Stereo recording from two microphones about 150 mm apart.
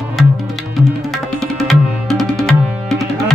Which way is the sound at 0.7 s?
Centre (ahead or behind).